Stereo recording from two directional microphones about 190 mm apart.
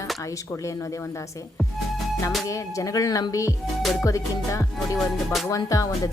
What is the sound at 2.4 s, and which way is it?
A woman's voice, 15° left (ahead or behind).